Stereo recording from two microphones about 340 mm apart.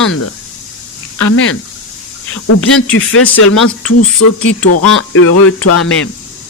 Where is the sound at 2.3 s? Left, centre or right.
Left.